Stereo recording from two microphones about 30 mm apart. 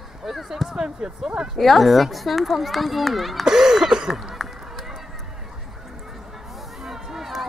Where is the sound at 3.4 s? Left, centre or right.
Centre.